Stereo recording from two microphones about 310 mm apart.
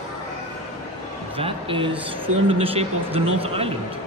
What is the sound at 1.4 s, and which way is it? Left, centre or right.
A man's voice, centre.